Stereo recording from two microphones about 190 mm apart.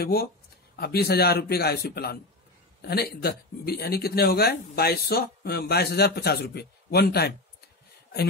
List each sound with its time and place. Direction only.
0.0 s speech: 55° left (ahead or behind)